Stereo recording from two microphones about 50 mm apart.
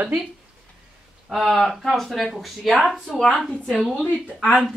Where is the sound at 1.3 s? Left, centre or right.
Centre.